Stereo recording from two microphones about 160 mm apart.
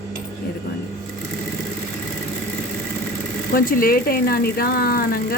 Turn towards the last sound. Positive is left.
turn(degrees=65)  # may be behind; listen again after turning